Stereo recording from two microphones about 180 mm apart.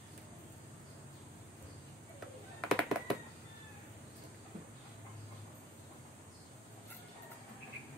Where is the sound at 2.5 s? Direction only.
Centre (ahead or behind).